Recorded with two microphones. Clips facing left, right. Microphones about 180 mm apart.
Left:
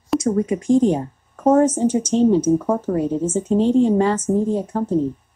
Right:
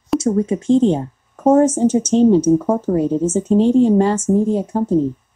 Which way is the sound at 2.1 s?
20° right (ahead or behind).